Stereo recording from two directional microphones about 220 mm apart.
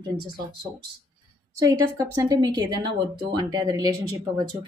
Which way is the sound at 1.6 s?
15° right (ahead or behind).